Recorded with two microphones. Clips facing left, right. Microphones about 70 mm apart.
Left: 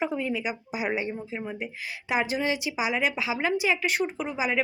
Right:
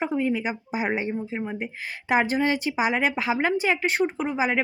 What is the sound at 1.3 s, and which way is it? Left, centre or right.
Speech, right.